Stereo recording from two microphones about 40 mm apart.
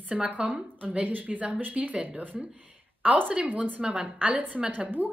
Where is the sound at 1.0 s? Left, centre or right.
Right.